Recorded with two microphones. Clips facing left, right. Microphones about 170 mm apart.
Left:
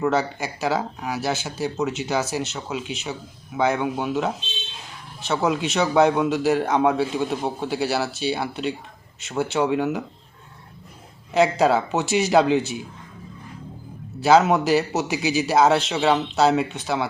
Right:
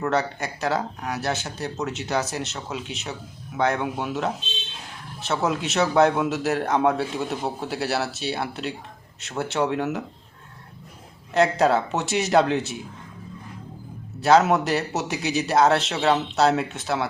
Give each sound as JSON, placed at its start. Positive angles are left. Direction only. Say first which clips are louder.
{"t": 0.0, "sound": "speech", "louder": "left 2 dB", "side_deg": 5}
{"t": 11.3, "sound": "speech", "louder": "left 1 dB", "side_deg": 0}
{"t": 14.2, "sound": "speech", "louder": "left 1 dB", "side_deg": 0}